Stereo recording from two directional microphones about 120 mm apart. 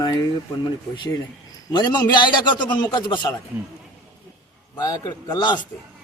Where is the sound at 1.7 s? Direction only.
35° left (ahead or behind).